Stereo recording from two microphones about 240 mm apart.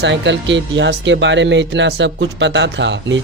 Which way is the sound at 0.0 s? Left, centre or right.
Right.